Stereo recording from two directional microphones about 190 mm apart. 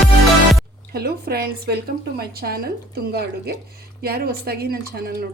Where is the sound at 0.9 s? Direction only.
55° right (ahead or behind).